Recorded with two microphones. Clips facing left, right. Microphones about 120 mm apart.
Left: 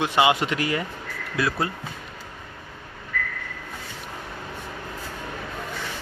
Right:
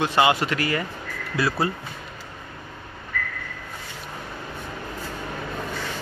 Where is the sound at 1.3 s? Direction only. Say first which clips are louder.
Right 1 dB; 5° right (ahead or behind).